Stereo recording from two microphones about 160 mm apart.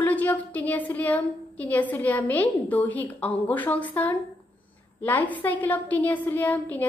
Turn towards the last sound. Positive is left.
turn(degrees=10)  # may be behind; listen again after turning